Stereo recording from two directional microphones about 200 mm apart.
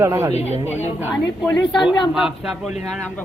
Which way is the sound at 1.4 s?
20° left (ahead or behind).